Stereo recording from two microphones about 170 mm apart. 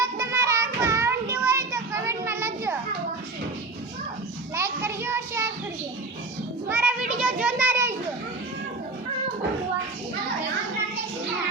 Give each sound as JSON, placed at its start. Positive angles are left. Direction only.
{"t": 0.0, "sound": "child singing", "side_deg": -20}
{"t": 4.5, "sound": "child singing", "side_deg": -15}
{"t": 6.7, "sound": "children playing", "side_deg": -10}
{"t": 7.2, "sound": "a sound", "side_deg": -5}